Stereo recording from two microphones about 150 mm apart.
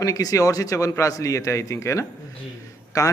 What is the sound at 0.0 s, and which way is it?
A man's voice, 25° left (ahead or behind).